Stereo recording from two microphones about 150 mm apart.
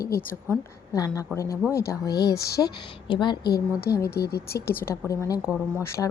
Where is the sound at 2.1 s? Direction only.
90° left.